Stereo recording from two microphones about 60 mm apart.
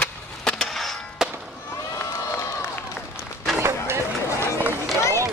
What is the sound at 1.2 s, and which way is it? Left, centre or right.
Fireworks, centre.